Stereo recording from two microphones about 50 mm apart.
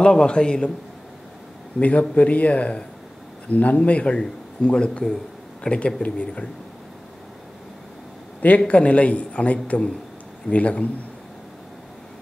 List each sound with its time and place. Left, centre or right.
0.0 s a man's voice: centre
1.8 s a man's voice: left
8.4 s a man's voice: left